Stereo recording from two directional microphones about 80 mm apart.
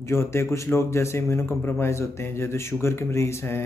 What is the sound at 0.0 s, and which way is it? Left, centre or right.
A man's voice, left.